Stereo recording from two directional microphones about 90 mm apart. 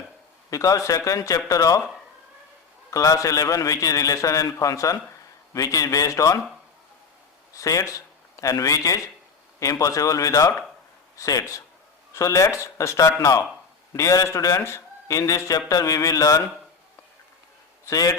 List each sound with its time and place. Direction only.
0.5 s a man's voice: 35° left (ahead or behind)
2.9 s a man's voice: 35° left (ahead or behind)
7.5 s a man's voice: 40° left (ahead or behind)
17.8 s a man's voice: 40° left (ahead or behind)